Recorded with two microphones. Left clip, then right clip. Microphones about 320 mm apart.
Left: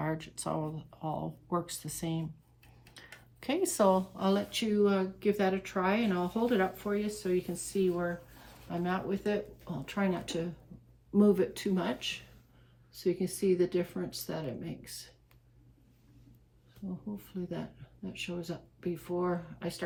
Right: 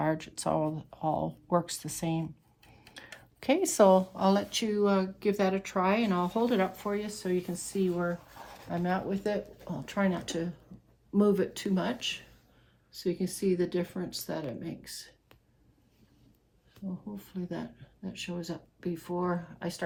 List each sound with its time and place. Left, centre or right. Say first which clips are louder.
0.0 s speech: right 6 dB; right
3.4 s speech: right 5 dB; right; by 14.9 s centre
17.4 s speech: right 2 dB; centre